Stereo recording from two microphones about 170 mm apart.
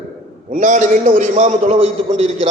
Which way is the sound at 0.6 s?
45° right (ahead or behind).